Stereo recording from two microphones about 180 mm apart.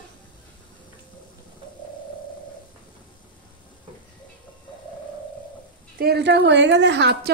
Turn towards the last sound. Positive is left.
turn(degrees=-75)  # may be behind; listen again after turning